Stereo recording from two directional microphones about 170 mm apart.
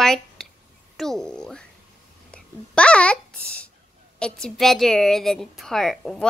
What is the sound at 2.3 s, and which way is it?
Babbling, 5° left (ahead or behind).